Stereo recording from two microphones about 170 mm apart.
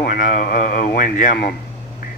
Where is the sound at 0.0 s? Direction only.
55° left (ahead or behind).